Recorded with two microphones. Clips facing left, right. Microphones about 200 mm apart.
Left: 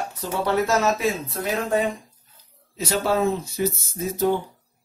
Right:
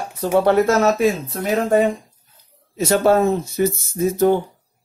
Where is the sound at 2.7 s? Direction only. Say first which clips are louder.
Right 7 dB; 50° right (ahead or behind).